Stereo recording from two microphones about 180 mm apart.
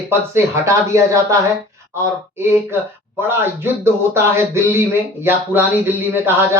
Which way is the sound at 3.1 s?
15° right (ahead or behind).